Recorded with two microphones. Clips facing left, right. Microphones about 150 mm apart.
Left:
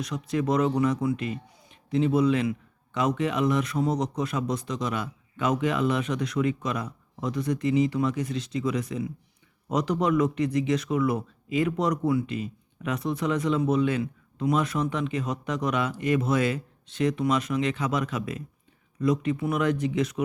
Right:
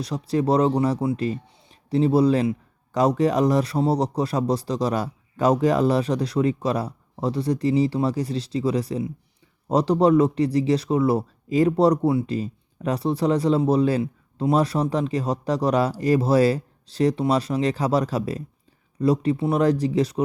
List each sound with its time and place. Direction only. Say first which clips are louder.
0.0 s speech: right 4 dB; 35° right (ahead or behind)